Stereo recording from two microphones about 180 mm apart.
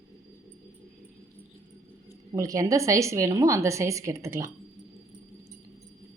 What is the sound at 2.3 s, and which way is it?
A woman's voice, 20° right (ahead or behind).